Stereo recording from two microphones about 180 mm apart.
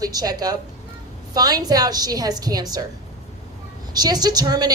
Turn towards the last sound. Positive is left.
turn(degrees=-20)  # may be behind; listen again after turning